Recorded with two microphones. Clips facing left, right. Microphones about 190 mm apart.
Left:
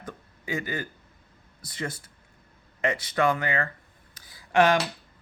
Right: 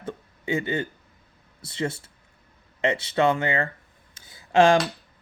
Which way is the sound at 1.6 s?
25° right (ahead or behind).